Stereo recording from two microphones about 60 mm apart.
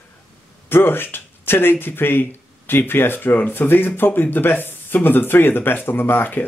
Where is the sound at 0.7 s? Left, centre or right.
Left.